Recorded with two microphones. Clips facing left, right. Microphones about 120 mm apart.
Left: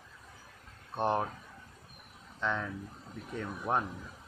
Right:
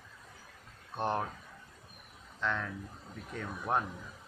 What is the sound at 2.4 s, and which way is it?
Speech, 10° left (ahead or behind).